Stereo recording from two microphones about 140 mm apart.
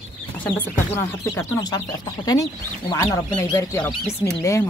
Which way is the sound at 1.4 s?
25° left (ahead or behind).